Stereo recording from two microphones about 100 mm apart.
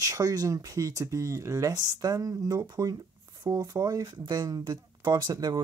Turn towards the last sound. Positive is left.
turn(degrees=-40)  # may be behind; listen again after turning